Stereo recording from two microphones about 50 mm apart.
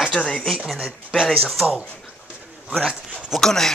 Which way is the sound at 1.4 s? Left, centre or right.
Centre.